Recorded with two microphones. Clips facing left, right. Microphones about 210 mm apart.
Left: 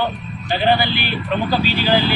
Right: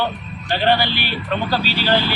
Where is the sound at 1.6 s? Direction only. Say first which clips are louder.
Left 3 dB; 45° left (ahead or behind).